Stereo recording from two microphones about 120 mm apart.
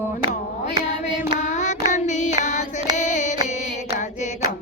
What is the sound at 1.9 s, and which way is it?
Child singing, 80° left.